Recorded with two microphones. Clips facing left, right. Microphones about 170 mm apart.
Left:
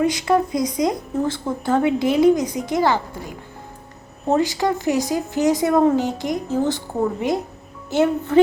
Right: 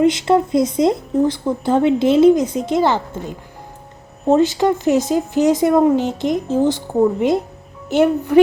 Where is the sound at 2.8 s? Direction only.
20° right (ahead or behind).